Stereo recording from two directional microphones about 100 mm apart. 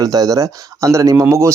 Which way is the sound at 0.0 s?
35° right (ahead or behind).